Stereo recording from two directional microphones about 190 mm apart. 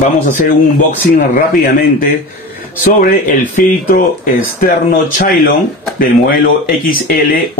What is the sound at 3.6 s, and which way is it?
Speech, 45° left (ahead or behind).